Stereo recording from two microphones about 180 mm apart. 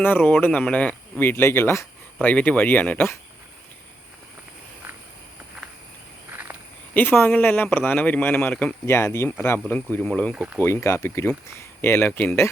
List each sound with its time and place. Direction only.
0.0 s speech: 10° left (ahead or behind)
6.9 s speech: 10° left (ahead or behind)
10.3 s speech: 5° right (ahead or behind)
10.6 s speech: 15° left (ahead or behind)